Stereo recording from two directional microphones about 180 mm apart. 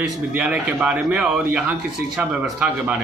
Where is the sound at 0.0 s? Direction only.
5° right (ahead or behind).